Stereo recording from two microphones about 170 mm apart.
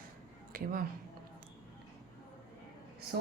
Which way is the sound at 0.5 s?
55° right (ahead or behind).